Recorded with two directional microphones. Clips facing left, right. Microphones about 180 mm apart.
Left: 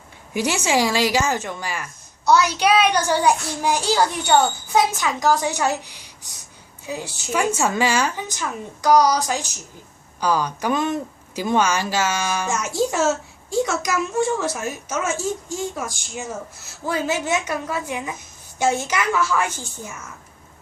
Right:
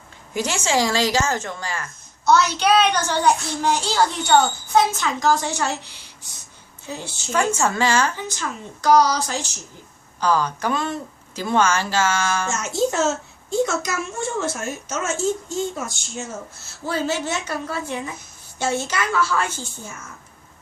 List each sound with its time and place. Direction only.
0.3 s a woman's voice: 15° left (ahead or behind)
6.8 s a woman's voice: 15° left (ahead or behind)